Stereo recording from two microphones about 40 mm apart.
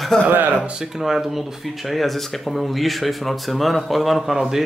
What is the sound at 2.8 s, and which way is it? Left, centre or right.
Speech, centre.